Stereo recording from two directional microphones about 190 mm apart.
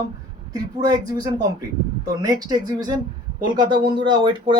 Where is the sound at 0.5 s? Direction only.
20° right (ahead or behind).